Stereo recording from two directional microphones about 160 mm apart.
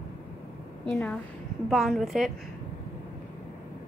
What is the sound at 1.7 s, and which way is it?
Speech, centre (ahead or behind).